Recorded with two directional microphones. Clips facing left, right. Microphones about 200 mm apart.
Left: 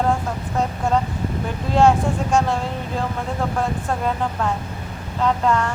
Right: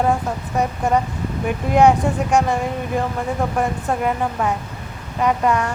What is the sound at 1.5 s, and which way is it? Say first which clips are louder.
A woman's voice: right 2 dB; 15° right (ahead or behind).